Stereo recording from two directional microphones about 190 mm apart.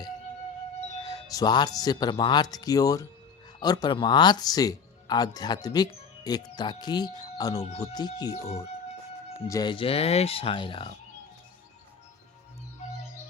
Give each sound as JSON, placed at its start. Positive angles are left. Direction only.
{"t": 1.0, "sound": "speech", "side_deg": 20}
{"t": 7.6, "sound": "speech", "side_deg": 35}
{"t": 7.9, "sound": "speech", "side_deg": 20}
{"t": 9.5, "sound": "speech", "side_deg": 20}